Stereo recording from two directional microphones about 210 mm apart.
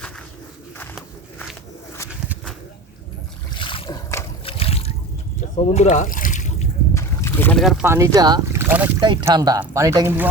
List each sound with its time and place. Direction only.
3.5 s boat: 25° left (ahead or behind)
4.4 s trickle: 25° left (ahead or behind)
5.5 s a sound: 30° left (ahead or behind)
6.9 s boat: 15° left (ahead or behind)
7.9 s speech: 15° right (ahead or behind)
9.0 s speech: 20° right (ahead or behind)